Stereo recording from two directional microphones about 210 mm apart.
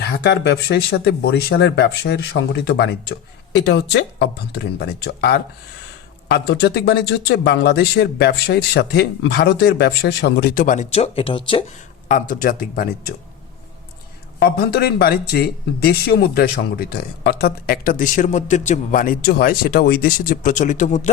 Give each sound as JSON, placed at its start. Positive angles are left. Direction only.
{"t": 0.0, "sound": "speech", "side_deg": 50}
{"t": 12.3, "sound": "speech", "side_deg": 40}
{"t": 14.5, "sound": "speech", "side_deg": 50}